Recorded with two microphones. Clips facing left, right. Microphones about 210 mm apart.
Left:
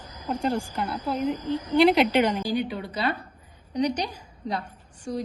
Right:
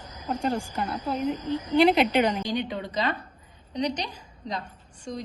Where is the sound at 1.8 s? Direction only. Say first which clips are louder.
Left 2 dB; 5° left (ahead or behind).